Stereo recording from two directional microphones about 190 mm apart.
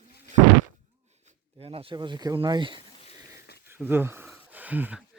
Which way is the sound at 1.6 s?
30° right (ahead or behind).